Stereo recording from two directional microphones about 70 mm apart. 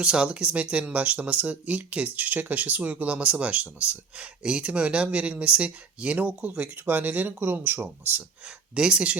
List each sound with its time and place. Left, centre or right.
0.0 s speech: centre
8.7 s speech: centre